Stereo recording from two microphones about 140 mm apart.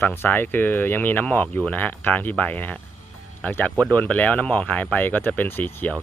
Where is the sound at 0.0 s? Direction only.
15° left (ahead or behind).